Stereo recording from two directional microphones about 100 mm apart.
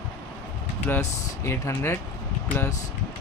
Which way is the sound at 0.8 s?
25° left (ahead or behind).